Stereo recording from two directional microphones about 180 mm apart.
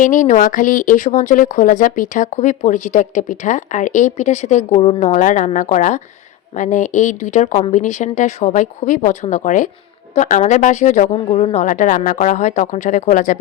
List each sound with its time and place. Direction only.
0.0 s speech: 45° left (ahead or behind)